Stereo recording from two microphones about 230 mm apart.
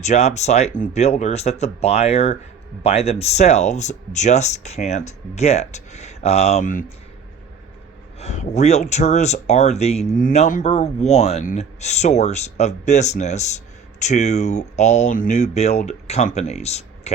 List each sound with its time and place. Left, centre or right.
0.0 s speech: left
8.2 s speech: left